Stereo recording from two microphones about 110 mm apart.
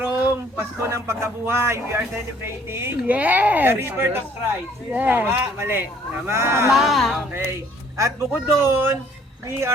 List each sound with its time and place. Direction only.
0.0 s speech: 20° right (ahead or behind)
6.7 s a woman's voice: centre (ahead or behind)
7.9 s speech: 25° right (ahead or behind)